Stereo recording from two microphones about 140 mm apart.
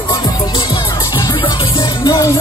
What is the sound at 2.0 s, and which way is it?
Music, 25° left (ahead or behind).